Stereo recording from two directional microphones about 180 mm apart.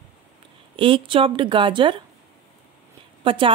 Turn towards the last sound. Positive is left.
turn(degrees=-30)  # may be behind; listen again after turning